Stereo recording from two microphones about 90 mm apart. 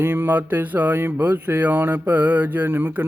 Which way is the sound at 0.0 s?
25° right (ahead or behind).